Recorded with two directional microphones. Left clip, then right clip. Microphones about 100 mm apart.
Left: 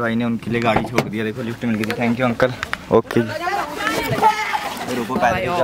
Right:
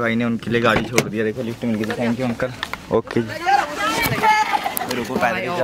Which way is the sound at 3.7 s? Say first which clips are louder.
Right 1 dB; 15° right (ahead or behind).